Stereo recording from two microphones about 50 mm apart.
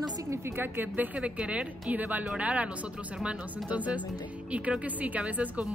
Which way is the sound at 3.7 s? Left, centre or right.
Right.